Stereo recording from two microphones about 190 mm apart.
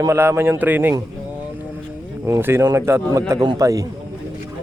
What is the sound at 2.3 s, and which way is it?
Speech, 15° right (ahead or behind).